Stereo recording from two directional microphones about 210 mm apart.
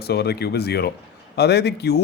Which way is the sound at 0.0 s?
50° left (ahead or behind).